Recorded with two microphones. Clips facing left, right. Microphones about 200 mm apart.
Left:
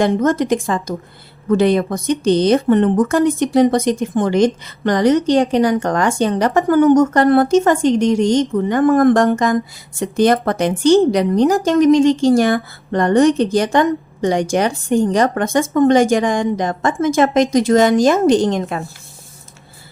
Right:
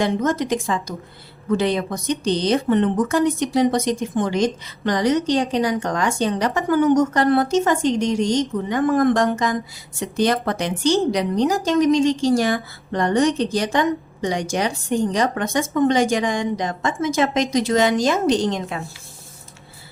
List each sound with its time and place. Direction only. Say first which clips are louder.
0.0 s a woman's voice: left 5 dB; 55° left (ahead or behind)